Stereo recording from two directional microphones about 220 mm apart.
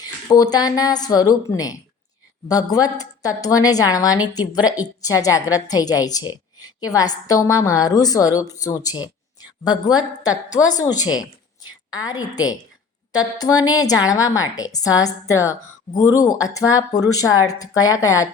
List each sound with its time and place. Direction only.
0.0 s a woman's voice: 15° left (ahead or behind)